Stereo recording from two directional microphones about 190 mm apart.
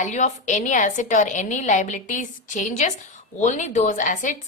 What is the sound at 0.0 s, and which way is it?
A woman's voice, 40° left (ahead or behind).